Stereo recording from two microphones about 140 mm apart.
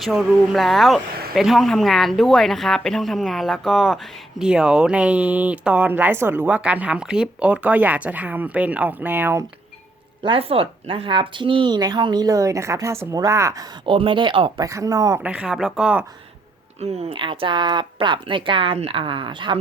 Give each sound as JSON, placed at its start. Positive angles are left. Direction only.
{"t": 0.0, "sound": "speech", "side_deg": -5}
{"t": 10.2, "sound": "speech", "side_deg": -40}
{"t": 13.8, "sound": "speech", "side_deg": -40}
{"t": 14.6, "sound": "speech", "side_deg": -25}
{"t": 15.2, "sound": "speech", "side_deg": -10}
{"t": 16.8, "sound": "speech", "side_deg": -50}